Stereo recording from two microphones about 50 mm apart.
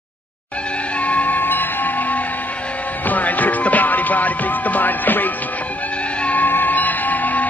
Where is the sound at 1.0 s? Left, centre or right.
Left.